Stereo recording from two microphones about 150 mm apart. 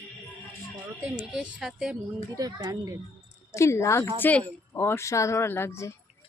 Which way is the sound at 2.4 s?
25° right (ahead or behind).